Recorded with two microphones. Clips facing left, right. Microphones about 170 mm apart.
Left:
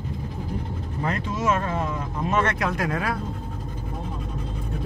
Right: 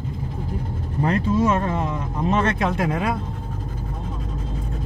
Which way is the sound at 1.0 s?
30° right (ahead or behind).